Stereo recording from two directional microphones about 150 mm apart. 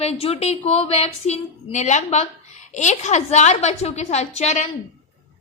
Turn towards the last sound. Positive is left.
turn(degrees=50)  # may be behind; listen again after turning